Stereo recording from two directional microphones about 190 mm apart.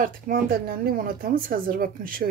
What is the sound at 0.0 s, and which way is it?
A woman's voice, 50° right (ahead or behind).